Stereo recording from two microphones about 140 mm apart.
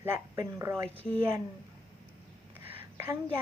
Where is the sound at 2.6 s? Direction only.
15° right (ahead or behind).